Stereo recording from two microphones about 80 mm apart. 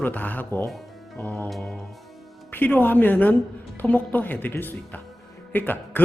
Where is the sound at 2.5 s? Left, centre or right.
Left.